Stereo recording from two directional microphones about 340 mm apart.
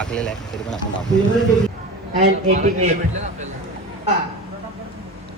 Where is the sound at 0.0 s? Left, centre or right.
Centre.